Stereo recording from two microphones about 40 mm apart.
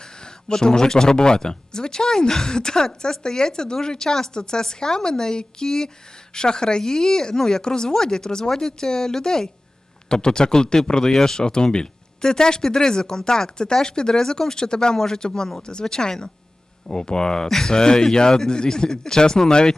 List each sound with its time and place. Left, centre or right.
0.0 s speech: centre